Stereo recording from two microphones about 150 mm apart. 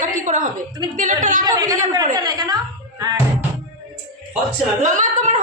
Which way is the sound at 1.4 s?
25° right (ahead or behind).